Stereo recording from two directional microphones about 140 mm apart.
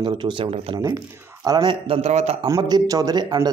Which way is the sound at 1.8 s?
45° right (ahead or behind).